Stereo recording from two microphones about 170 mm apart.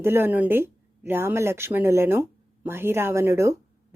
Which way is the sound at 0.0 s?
15° right (ahead or behind).